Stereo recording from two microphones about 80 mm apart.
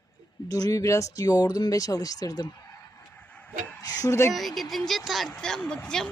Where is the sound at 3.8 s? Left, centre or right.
Left.